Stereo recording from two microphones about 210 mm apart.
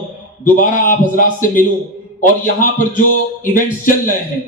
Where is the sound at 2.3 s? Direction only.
40° left (ahead or behind).